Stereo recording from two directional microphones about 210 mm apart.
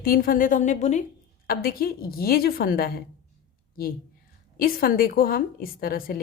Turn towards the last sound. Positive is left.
turn(degrees=45)  # may be behind; listen again after turning